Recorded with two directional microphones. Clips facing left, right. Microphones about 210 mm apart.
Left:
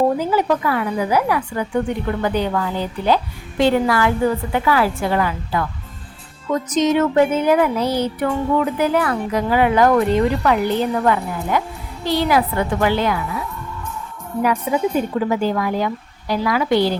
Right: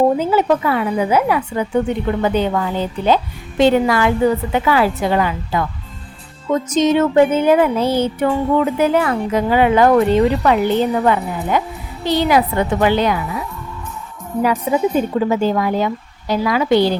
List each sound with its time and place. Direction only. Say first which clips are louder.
0.2 s music: right 3 dB; 25° right (ahead or behind)
14.4 s music: right 2 dB; 25° right (ahead or behind)